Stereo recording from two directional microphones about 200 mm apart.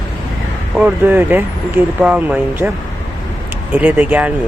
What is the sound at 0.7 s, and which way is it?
Speech, 10° right (ahead or behind).